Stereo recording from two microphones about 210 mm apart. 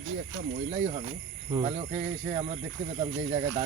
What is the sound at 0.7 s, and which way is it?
Speech, 35° right (ahead or behind).